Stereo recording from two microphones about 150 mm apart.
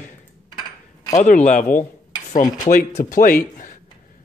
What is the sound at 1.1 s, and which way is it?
Speech, 55° left (ahead or behind).